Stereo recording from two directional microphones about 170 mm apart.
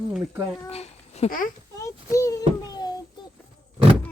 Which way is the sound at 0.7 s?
40° left (ahead or behind).